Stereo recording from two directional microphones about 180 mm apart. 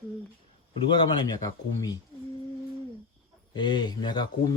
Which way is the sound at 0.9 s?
25° left (ahead or behind).